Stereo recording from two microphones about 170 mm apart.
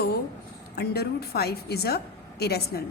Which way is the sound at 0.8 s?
70° left (ahead or behind).